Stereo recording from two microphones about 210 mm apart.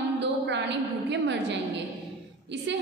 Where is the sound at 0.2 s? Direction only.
55° right (ahead or behind).